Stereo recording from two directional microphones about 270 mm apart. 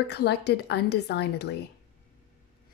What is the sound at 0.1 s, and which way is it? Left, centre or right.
Speech, left.